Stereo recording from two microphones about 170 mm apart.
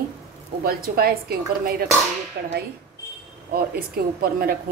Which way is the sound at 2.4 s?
75° right (ahead or behind).